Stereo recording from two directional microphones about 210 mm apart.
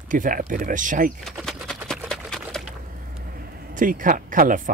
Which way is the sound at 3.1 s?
45° right (ahead or behind).